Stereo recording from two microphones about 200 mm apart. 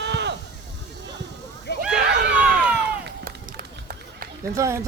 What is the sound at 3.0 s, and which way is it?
Run, 50° right (ahead or behind).